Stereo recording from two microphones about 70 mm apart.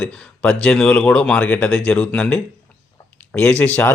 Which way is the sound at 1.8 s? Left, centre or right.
Centre.